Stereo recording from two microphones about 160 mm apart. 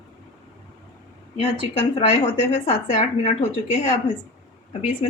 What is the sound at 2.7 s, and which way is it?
Speech, 45° left (ahead or behind).